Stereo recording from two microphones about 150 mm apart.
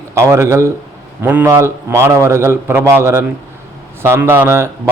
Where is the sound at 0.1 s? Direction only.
20° right (ahead or behind).